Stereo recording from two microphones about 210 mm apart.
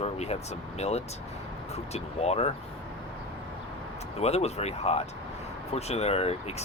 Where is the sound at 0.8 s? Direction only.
30° left (ahead or behind).